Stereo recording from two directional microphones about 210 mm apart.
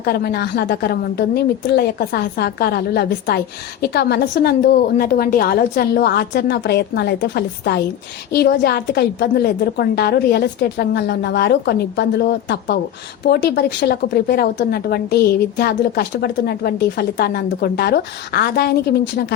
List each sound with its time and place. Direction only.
0.0 s a woman's voice: 45° left (ahead or behind)